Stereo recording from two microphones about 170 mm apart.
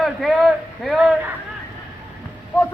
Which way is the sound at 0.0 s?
Centre (ahead or behind).